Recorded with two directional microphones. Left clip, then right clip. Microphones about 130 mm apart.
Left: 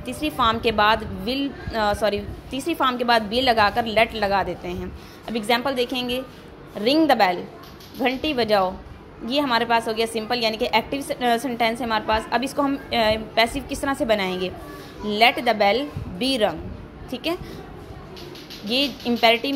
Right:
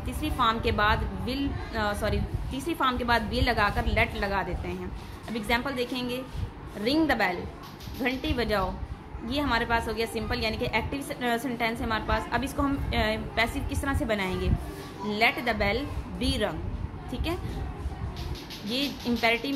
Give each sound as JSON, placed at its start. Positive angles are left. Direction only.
{"t": 0.0, "sound": "a woman's voice", "side_deg": 30}
{"t": 18.7, "sound": "a woman's voice", "side_deg": 35}